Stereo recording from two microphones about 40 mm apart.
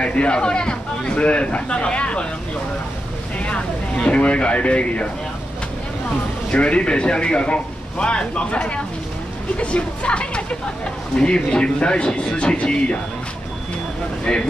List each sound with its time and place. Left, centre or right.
0.0 s speech: left
3.3 s speech: left
6.5 s speech: left